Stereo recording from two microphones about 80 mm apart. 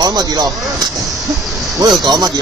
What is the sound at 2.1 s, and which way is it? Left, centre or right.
Speech, right.